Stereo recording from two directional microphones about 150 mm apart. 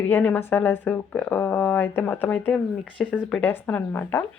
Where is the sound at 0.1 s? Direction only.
10° left (ahead or behind).